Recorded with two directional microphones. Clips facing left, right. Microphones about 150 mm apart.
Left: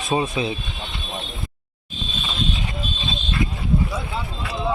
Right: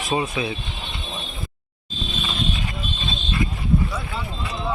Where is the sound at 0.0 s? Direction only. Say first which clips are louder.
Left 2 dB; 25° left (ahead or behind).